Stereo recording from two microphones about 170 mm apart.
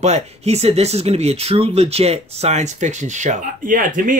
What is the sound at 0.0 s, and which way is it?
Speech, 40° right (ahead or behind).